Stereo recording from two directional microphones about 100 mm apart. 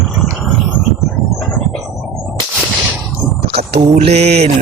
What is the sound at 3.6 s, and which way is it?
Mantra, 90° right.